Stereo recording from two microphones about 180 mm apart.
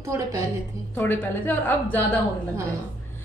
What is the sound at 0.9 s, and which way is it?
Speech, 10° left (ahead or behind).